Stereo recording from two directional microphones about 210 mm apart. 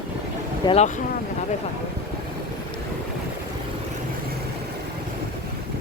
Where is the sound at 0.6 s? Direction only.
30° left (ahead or behind).